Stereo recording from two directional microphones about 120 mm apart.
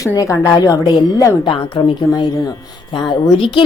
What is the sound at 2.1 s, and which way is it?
A woman's voice, 30° left (ahead or behind).